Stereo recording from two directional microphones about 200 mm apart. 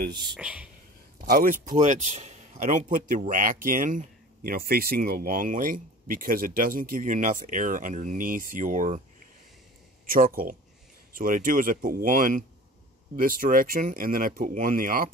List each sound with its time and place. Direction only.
0.1 s speech: 20° right (ahead or behind)
0.4 s speech: 5° right (ahead or behind)
1.2 s a man's voice: 45° right (ahead or behind)
10.0 s speech: 45° right (ahead or behind)